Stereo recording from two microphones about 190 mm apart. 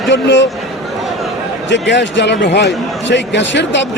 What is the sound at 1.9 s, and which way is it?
A man's voice, 65° left (ahead or behind).